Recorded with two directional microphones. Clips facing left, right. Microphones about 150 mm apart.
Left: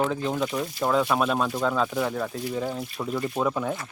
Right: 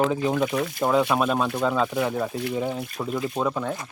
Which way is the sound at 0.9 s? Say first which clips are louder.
Right 1 dB; centre (ahead or behind).